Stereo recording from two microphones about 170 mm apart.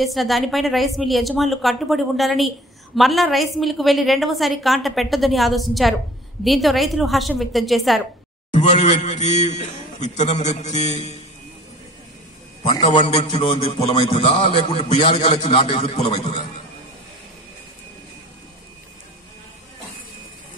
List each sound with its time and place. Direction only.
0.0 s a woman's voice: centre (ahead or behind)
8.5 s a man's voice: 45° left (ahead or behind)
12.6 s a man's voice: 25° left (ahead or behind)